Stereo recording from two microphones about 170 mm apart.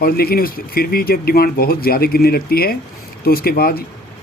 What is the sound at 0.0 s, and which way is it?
Speech, 60° left (ahead or behind).